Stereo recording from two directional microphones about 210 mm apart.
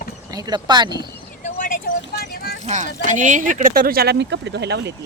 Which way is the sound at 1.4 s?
40° left (ahead or behind).